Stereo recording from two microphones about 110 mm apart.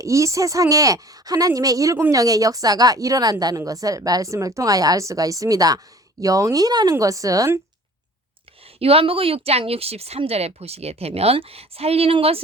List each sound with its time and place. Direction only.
0.0 s speech: 30° right (ahead or behind)
8.8 s speech: 60° right (ahead or behind)